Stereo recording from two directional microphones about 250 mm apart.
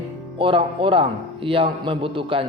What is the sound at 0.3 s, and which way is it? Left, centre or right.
Speech, right.